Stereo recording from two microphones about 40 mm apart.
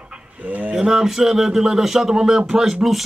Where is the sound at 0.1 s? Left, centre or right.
Right.